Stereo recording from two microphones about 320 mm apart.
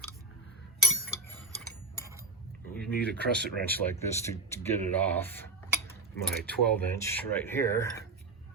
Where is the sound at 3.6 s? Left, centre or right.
Centre.